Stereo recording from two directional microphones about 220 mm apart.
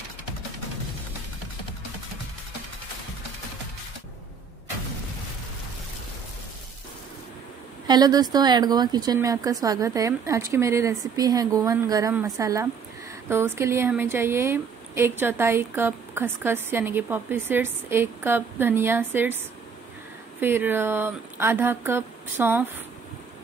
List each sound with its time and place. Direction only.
7.8 s a woman's voice: 20° right (ahead or behind)
20.3 s a woman's voice: 10° right (ahead or behind)